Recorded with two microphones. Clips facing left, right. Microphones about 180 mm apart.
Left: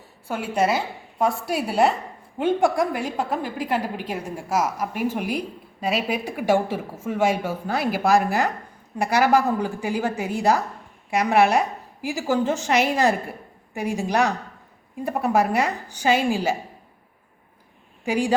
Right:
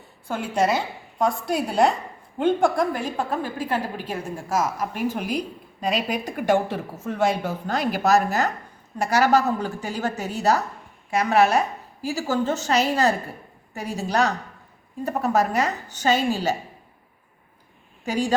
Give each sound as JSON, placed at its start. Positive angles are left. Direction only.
{"t": 0.3, "sound": "a woman's voice", "side_deg": 5}
{"t": 18.0, "sound": "speech", "side_deg": 10}